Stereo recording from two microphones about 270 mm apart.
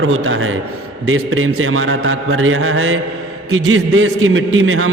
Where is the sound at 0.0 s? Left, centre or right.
Right.